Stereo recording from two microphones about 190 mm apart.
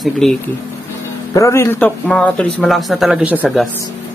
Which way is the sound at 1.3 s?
15° left (ahead or behind).